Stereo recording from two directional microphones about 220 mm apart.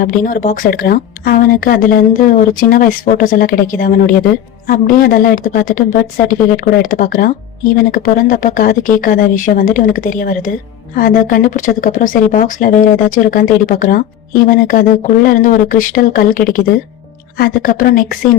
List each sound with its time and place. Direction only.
0.0 s a woman's voice: 40° left (ahead or behind)